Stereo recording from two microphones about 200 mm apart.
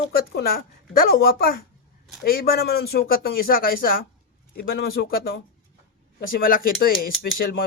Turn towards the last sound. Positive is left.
turn(degrees=50)  # may be behind; listen again after turning